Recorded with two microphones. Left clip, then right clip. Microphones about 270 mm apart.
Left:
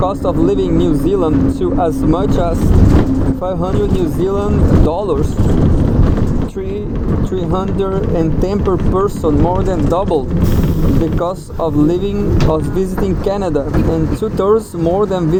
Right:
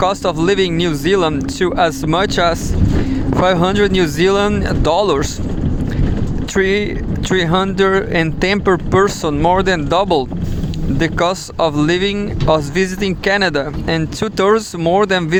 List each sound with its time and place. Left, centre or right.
0.3 s speech: right
1.2 s speech: right
7.5 s speech: right
8.1 s speech: right
8.7 s speech: right
11.8 s speech: right
13.4 s speech: right